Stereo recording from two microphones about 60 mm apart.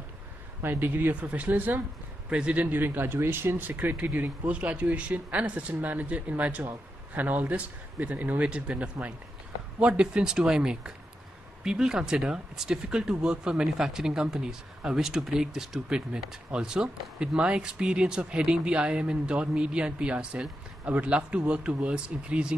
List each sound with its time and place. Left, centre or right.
0.6 s speech: right
2.2 s a man's voice: centre
2.6 s speech: right; by 22.6 s centre